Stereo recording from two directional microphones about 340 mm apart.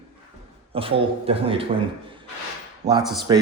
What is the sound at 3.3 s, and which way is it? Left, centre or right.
Speech, centre.